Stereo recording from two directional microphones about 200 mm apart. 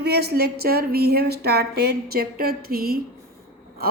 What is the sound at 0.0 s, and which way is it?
A woman's voice, 55° right (ahead or behind).